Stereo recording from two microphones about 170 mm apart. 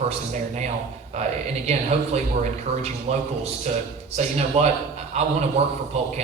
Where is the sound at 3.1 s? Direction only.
40° right (ahead or behind).